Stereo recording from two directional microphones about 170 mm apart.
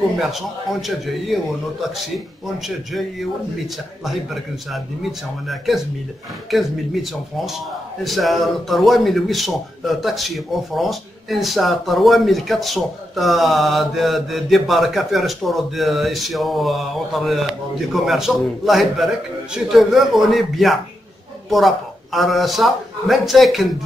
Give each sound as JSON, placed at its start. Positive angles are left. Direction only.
{"t": 0.2, "sound": "a man's voice", "side_deg": 0}
{"t": 6.5, "sound": "a man's voice", "side_deg": 0}